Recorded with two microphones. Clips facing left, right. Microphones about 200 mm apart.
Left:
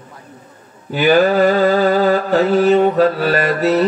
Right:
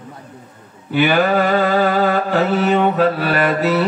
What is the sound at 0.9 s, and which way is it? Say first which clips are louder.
Mantra: left 2 dB; 40° left (ahead or behind).